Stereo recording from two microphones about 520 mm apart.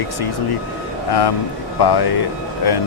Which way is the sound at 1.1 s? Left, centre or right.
Left.